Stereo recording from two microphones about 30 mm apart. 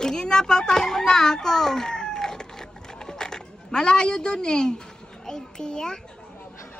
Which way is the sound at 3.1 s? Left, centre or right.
Left.